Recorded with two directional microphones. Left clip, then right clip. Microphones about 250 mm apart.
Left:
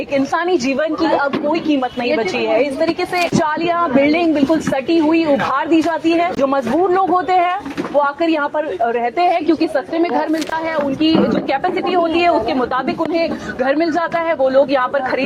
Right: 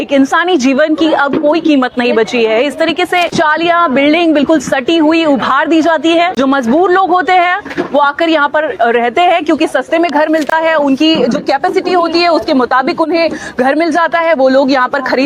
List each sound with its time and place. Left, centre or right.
0.1 s speech: right